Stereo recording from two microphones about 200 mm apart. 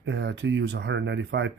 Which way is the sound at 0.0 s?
60° right (ahead or behind).